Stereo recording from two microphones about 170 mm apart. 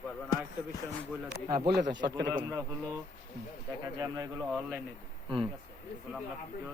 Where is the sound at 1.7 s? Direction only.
90° right.